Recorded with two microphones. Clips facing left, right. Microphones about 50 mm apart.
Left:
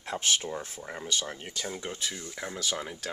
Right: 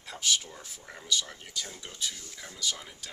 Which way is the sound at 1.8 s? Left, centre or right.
Left.